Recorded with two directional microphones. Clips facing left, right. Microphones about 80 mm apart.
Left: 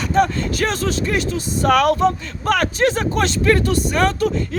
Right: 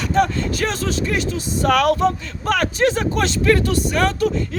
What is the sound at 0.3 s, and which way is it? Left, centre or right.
A man's voice, left.